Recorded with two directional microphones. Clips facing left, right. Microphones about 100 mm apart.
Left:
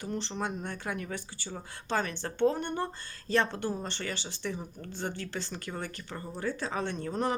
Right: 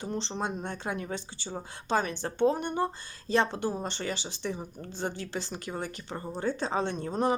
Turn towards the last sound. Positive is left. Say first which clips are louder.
# right 3 dB
turn(degrees=-20)  # may be behind; listen again after turning